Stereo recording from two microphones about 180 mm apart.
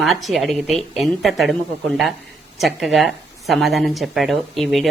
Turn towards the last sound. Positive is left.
turn(degrees=0)  # may be behind; listen again after turning